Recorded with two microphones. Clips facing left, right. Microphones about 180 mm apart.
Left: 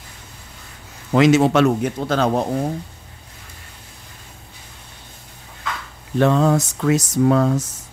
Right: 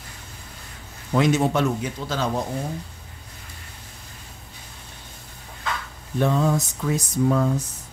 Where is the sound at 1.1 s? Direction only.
90° left; by 2.4 s 65° left (ahead or behind).